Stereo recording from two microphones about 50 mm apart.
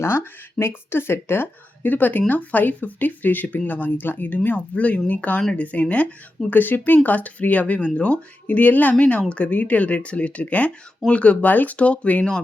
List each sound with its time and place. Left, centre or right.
0.0 s speech: left